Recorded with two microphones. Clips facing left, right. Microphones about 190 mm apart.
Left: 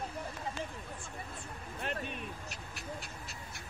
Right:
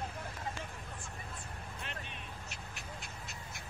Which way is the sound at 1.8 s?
45° left (ahead or behind).